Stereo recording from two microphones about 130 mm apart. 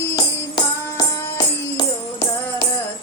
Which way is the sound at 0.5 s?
30° left (ahead or behind).